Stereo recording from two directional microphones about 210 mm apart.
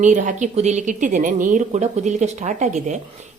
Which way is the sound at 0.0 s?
35° right (ahead or behind).